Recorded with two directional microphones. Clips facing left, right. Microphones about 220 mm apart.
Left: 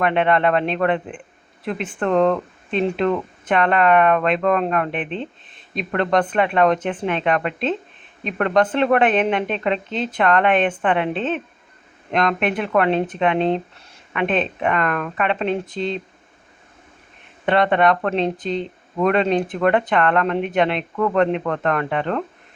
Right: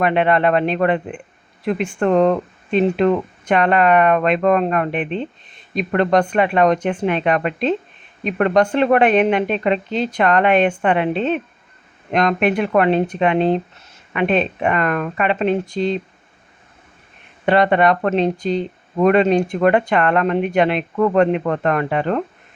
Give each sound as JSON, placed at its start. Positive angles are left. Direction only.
{"t": 0.0, "sound": "speech", "side_deg": -5}
{"t": 17.4, "sound": "speech", "side_deg": -5}